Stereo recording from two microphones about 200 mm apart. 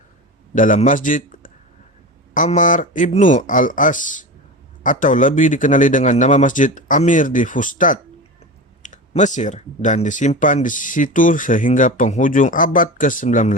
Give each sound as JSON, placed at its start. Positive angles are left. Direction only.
{"t": 0.5, "sound": "speech", "side_deg": 40}